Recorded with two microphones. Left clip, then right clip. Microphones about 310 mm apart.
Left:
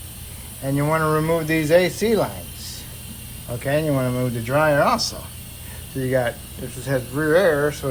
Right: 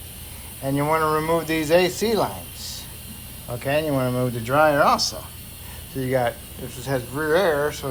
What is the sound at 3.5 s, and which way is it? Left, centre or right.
Speech, centre.